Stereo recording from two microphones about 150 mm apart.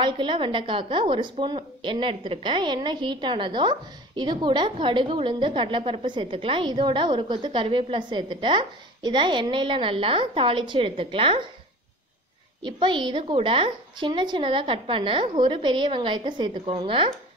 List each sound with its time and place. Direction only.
0.0 s a woman's voice: 35° right (ahead or behind)
12.6 s a woman's voice: 35° right (ahead or behind)